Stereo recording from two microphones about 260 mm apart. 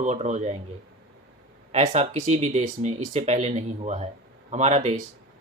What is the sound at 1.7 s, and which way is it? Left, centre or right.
Speech, right.